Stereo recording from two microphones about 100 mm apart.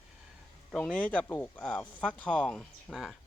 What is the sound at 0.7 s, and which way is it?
Speech, 10° left (ahead or behind).